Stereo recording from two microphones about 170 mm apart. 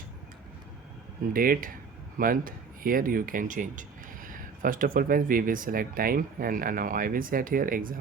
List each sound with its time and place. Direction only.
1.3 s speech: 55° right (ahead or behind)